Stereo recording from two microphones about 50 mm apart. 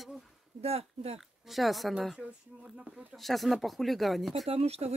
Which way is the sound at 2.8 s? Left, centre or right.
Centre.